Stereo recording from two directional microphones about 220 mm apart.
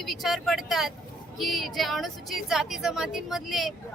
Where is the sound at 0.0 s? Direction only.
Centre (ahead or behind).